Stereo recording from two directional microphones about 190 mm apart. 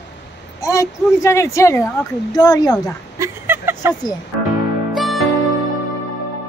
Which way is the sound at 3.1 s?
15° right (ahead or behind).